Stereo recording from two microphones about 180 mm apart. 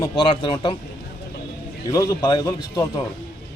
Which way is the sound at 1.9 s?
20° left (ahead or behind).